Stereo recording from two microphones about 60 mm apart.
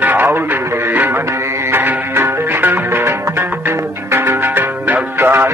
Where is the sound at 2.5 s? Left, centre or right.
Right.